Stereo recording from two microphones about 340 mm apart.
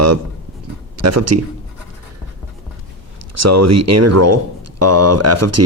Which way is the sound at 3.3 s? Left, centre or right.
Right.